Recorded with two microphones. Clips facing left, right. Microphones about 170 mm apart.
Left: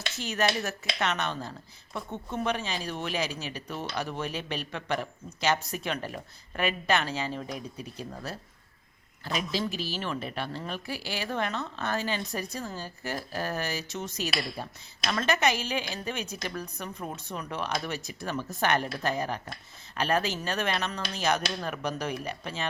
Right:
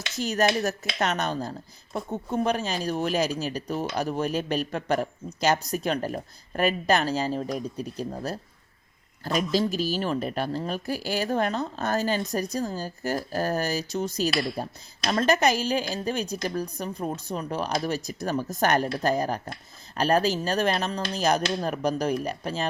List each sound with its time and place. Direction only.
0.2 s a woman's voice: 40° right (ahead or behind)